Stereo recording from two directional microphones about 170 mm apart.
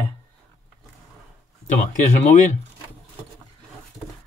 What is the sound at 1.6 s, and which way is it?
Speech, 50° left (ahead or behind).